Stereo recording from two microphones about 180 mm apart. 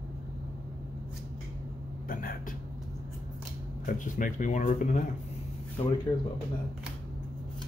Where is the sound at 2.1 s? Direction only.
50° left (ahead or behind).